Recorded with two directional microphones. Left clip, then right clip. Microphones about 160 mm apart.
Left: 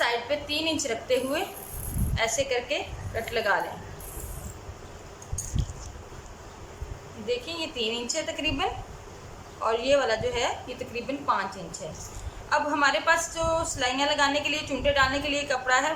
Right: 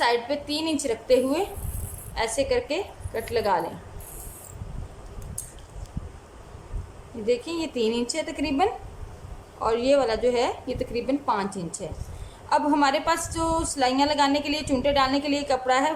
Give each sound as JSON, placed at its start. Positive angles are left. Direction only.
{"t": 0.0, "sound": "a woman's voice", "side_deg": -35}
{"t": 7.3, "sound": "a woman's voice", "side_deg": -35}